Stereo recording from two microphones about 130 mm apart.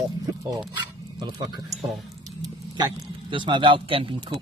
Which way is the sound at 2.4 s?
35° right (ahead or behind).